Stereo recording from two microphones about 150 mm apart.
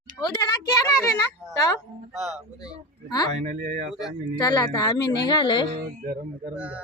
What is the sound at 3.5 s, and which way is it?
Speech, 65° right (ahead or behind).